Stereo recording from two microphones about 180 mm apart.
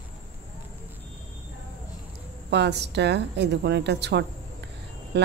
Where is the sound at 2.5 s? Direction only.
70° right (ahead or behind).